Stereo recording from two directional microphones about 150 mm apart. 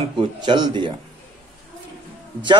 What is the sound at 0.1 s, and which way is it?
Speech, 30° right (ahead or behind).